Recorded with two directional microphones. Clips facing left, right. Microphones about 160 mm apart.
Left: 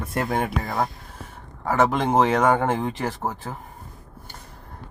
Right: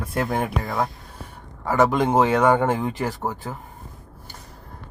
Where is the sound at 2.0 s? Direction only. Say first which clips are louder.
Right 1 dB; 25° left (ahead or behind).